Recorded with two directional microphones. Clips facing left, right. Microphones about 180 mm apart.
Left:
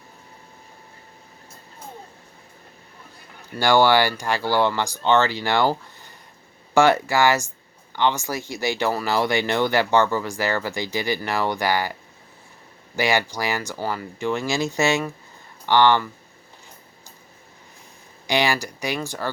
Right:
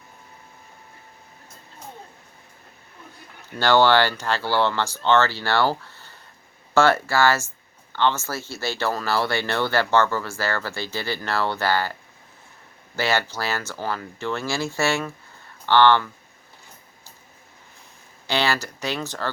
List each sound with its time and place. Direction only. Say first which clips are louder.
3.5 s speech: even; 10° left (ahead or behind)
13.0 s speech: left 2 dB; 15° left (ahead or behind)
18.3 s speech: left 2 dB; 15° left (ahead or behind)